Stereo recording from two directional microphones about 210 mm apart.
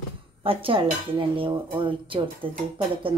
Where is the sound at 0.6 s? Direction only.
25° right (ahead or behind).